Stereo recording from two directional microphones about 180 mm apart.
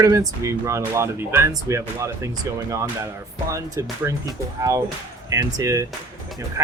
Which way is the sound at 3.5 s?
15° right (ahead or behind).